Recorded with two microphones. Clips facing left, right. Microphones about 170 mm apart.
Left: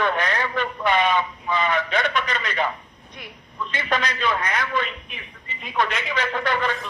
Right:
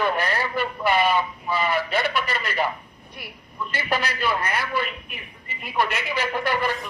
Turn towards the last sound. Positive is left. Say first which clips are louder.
# even
turn(degrees=-10)  # may be behind; listen again after turning